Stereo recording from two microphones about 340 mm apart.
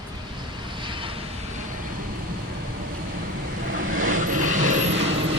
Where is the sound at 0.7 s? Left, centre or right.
Centre.